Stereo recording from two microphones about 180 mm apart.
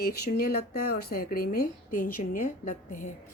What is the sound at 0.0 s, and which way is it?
Speech, 60° left (ahead or behind).